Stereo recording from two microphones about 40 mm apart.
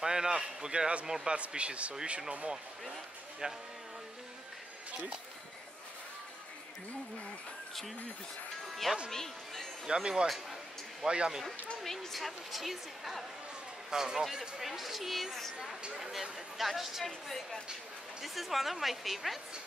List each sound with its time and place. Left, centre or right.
0.0 s a man's voice: centre
9.1 s speech: centre
9.8 s speech: right
10.2 s a sound: centre
11.1 s speech: right
11.8 s speech: centre
13.8 s a man's voice: centre
14.6 s speech: centre
15.5 s speech: right
16.0 s speech: centre